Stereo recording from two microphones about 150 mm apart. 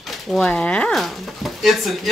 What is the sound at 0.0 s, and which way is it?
Speech, centre (ahead or behind).